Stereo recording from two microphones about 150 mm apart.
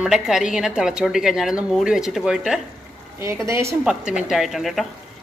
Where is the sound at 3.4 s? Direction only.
20° right (ahead or behind).